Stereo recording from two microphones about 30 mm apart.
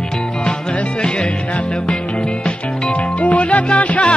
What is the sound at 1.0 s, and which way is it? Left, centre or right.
Music, left.